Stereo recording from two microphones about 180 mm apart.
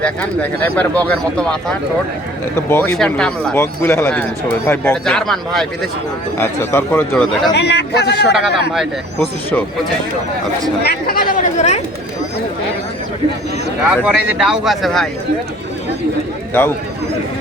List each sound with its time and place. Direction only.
0.0 s speech: 5° left (ahead or behind)
6.3 s speech: 10° left (ahead or behind)
7.1 s speech: centre (ahead or behind)
7.5 s a man's voice: 70° left (ahead or behind)
8.3 s speech: 5° right (ahead or behind)
9.1 s speech: 10° left (ahead or behind)
10.8 s chatter: 55° left (ahead or behind); by 11.8 s 40° left (ahead or behind)
13.8 s speech: 5° right (ahead or behind)